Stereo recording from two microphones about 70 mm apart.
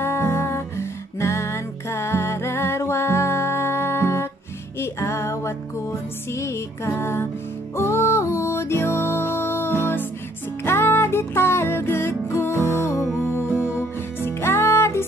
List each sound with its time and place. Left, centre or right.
0.0 s music: left